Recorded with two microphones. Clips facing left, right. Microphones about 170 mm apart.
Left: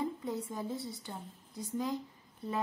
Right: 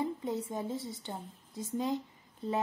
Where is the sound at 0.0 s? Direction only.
20° right (ahead or behind).